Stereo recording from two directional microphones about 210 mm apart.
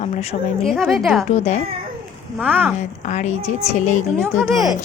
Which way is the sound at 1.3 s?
30° left (ahead or behind).